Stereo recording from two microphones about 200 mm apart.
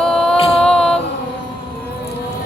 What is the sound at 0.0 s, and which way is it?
Music, 5° left (ahead or behind).